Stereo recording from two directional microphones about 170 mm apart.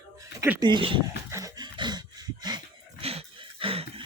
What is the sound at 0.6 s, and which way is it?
Speech, 30° right (ahead or behind).